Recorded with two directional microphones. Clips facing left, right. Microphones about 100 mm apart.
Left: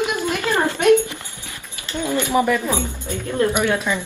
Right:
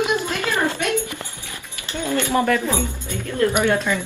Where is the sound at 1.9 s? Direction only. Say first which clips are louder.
Left 1 dB; 15° left (ahead or behind).